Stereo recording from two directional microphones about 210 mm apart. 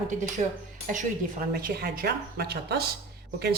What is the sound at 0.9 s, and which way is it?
A woman's voice, 40° right (ahead or behind).